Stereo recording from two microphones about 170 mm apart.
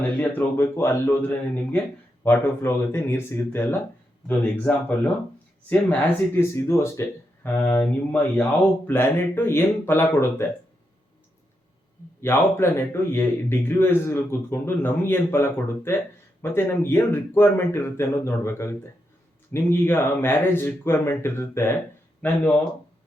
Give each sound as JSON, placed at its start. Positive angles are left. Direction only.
{"t": 0.2, "sound": "a man's voice", "side_deg": 10}
{"t": 12.2, "sound": "a man's voice", "side_deg": 15}